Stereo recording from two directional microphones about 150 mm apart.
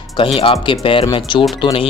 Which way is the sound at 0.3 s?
35° left (ahead or behind).